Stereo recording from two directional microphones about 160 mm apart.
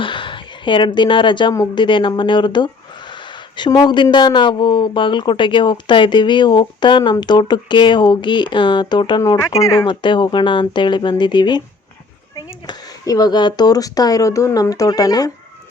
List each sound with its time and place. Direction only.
0.0 s a woman's voice: 30° left (ahead or behind)